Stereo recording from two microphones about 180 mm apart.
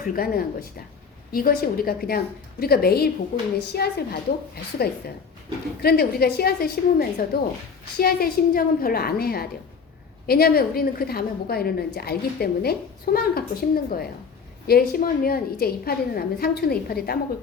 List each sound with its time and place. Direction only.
0.0 s a woman's voice: 55° left (ahead or behind)